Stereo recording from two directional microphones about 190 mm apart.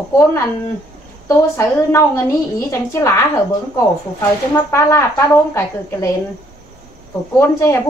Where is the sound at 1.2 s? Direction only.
15° left (ahead or behind).